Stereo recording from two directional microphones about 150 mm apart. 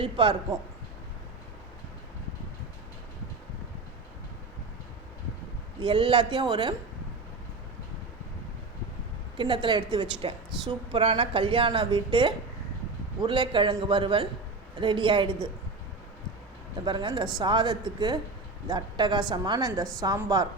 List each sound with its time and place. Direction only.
0.0 s a woman's voice: 35° right (ahead or behind)
5.8 s a woman's voice: 35° right (ahead or behind)
9.4 s a woman's voice: 35° right (ahead or behind)
16.8 s a woman's voice: 30° right (ahead or behind)